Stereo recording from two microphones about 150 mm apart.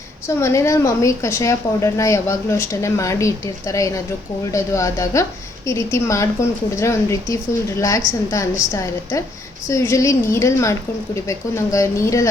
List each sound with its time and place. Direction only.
0.3 s a woman's voice: 20° left (ahead or behind)